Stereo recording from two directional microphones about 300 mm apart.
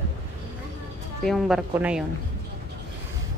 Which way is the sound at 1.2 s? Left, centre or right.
Centre.